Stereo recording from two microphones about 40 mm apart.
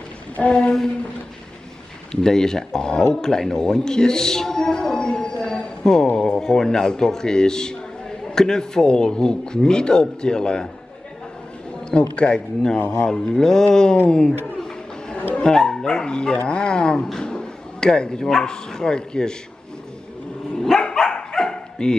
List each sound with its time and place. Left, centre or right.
0.5 s speech: left
2.2 s a man's voice: centre
12.2 s speech: left
13.1 s a man's voice: centre
14.4 s a sound: centre
15.4 s a man's voice: centre
20.5 s dog: centre